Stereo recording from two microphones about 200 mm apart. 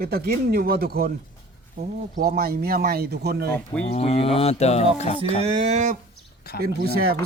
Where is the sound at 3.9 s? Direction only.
30° left (ahead or behind).